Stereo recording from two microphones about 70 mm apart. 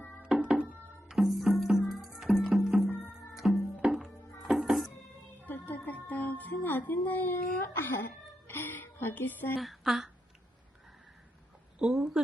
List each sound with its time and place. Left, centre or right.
0.3 s music: centre
5.5 s music: left
9.6 s speech: centre
11.8 s a sound: centre